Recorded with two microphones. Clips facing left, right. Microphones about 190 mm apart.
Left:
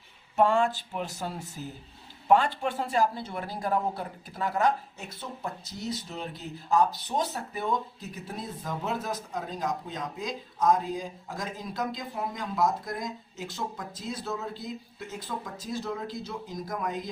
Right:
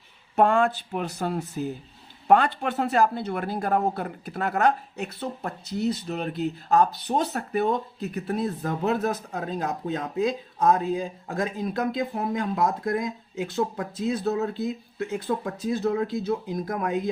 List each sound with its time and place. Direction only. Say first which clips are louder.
0.3 s speech: right 3 dB; 60° right (ahead or behind)